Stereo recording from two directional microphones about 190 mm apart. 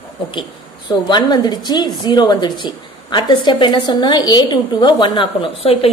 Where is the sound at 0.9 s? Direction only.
20° left (ahead or behind).